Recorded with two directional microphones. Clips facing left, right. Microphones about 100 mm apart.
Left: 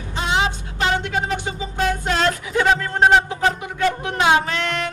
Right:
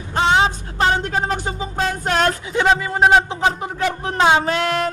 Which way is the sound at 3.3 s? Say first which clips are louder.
Even; 25° right (ahead or behind).